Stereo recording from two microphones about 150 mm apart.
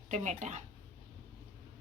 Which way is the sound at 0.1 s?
50° right (ahead or behind).